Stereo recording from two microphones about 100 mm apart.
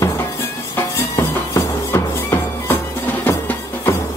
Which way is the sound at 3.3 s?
20° left (ahead or behind).